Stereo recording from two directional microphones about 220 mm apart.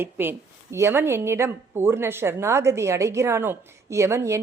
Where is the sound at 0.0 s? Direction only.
10° right (ahead or behind).